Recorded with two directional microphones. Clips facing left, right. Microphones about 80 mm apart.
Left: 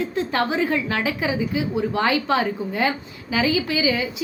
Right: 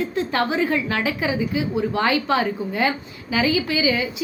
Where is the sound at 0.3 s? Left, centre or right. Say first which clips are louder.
Right 1 dB; centre.